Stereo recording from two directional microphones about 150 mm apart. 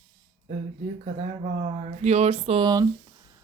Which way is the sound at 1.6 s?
50° right (ahead or behind).